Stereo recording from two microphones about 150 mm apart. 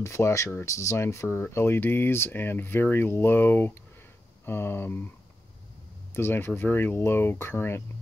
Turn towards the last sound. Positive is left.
turn(degrees=15)  # may be behind; listen again after turning